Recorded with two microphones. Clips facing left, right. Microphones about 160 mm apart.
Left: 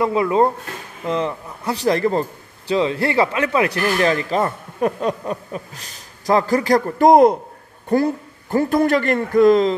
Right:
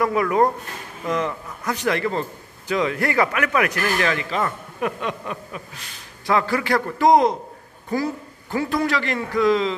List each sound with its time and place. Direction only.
0.0 s a man's voice: 25° left (ahead or behind); by 9.8 s 45° left (ahead or behind)